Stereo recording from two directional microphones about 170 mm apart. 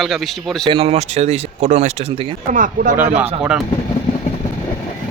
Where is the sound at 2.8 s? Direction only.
55° right (ahead or behind).